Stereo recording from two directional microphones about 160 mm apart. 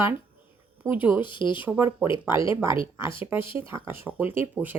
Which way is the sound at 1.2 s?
30° left (ahead or behind).